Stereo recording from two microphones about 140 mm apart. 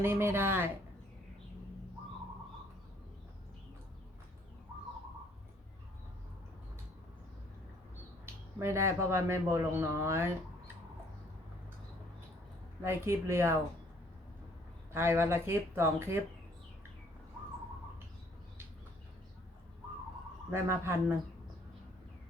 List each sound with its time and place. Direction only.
0.0 s speech: 15° right (ahead or behind)
8.5 s speech: 20° right (ahead or behind)
12.8 s speech: 20° right (ahead or behind)
14.9 s speech: 15° right (ahead or behind)
20.5 s speech: 15° right (ahead or behind)